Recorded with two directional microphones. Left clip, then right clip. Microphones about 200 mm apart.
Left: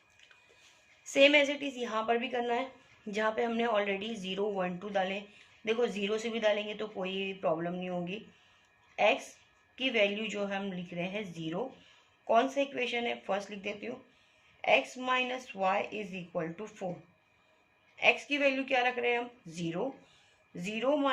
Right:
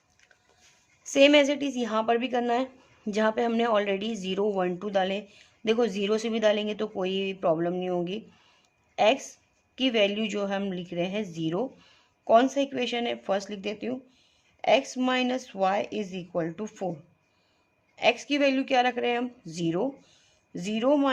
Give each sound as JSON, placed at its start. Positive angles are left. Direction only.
{"t": 1.1, "sound": "speech", "side_deg": -40}
{"t": 17.9, "sound": "speech", "side_deg": -40}